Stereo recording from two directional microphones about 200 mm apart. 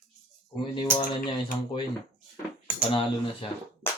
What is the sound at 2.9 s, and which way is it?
Speech, 25° left (ahead or behind).